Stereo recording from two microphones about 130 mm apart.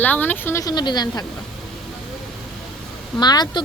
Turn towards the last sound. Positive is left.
turn(degrees=30)  # may be behind; listen again after turning